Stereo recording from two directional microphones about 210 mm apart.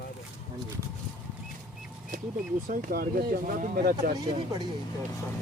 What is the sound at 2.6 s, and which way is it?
Speech, 45° right (ahead or behind).